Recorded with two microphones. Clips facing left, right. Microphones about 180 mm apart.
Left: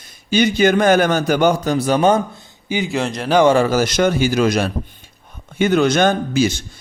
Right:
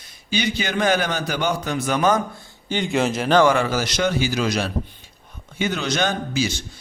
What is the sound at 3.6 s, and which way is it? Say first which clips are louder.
A man's voice: left 6 dB; 45° left (ahead or behind).